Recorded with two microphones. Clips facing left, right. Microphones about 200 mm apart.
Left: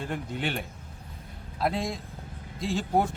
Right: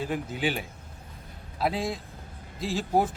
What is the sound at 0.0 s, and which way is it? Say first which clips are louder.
Speech: right 3 dB; 5° right (ahead or behind).